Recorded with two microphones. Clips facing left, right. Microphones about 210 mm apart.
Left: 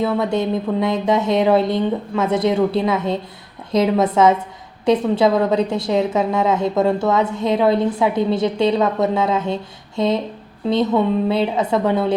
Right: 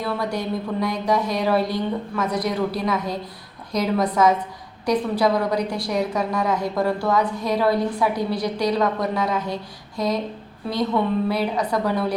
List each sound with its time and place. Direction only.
0.0 s a woman's voice: 25° left (ahead or behind)